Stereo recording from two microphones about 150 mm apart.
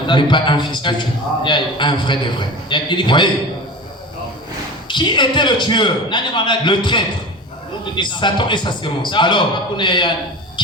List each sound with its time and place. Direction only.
0.1 s a man's voice: 30° left (ahead or behind)
4.9 s a man's voice: 30° left (ahead or behind)